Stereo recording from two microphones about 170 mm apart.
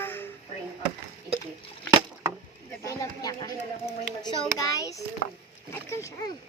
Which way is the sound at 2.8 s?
20° left (ahead or behind).